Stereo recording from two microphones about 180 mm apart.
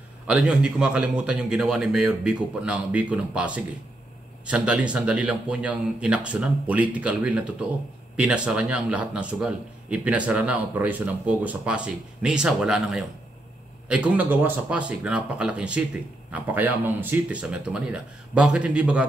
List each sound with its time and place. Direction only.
0.3 s speech: 5° right (ahead or behind)